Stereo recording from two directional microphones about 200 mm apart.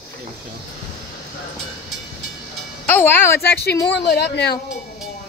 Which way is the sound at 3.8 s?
55° left (ahead or behind).